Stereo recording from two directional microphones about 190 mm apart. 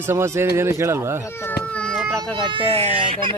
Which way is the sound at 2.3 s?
25° right (ahead or behind).